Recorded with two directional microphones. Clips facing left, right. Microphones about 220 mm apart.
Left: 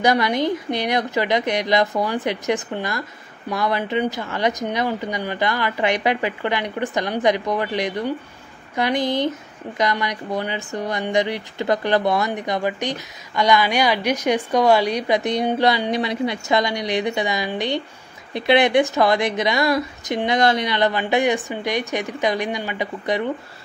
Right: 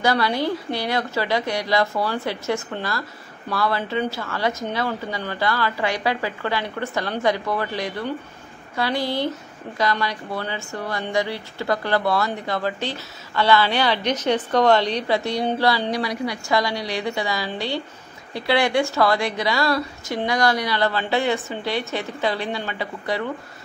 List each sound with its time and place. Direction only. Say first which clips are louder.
0.0 s a woman's voice: left 2 dB; 20° left (ahead or behind)